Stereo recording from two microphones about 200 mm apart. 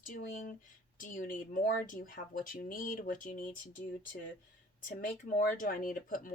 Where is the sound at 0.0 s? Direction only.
40° left (ahead or behind).